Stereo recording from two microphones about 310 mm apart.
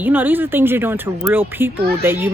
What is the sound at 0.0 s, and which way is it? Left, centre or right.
A child's voice, centre.